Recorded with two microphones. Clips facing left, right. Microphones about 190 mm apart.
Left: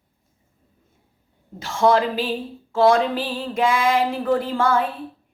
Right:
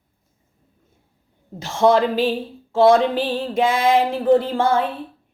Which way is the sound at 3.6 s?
25° right (ahead or behind).